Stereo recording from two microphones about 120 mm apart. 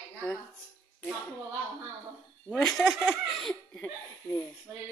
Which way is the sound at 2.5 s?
5° left (ahead or behind).